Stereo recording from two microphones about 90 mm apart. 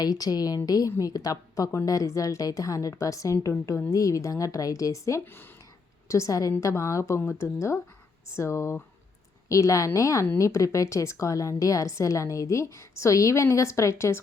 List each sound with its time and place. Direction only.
0.0 s a woman's voice: 45° left (ahead or behind)
5.2 s speech: 25° left (ahead or behind)
6.1 s a woman's voice: 35° left (ahead or behind)